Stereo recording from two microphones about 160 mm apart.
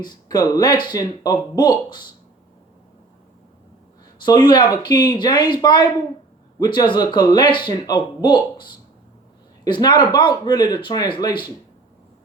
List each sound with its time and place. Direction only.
0.0 s speech: 25° left (ahead or behind)
4.8 s speech: 30° left (ahead or behind)